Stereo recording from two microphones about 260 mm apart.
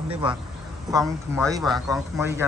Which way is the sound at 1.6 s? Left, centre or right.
Centre.